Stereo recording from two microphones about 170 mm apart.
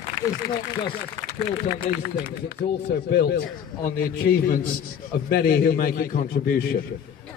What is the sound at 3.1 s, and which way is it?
A man's voice, 70° left (ahead or behind).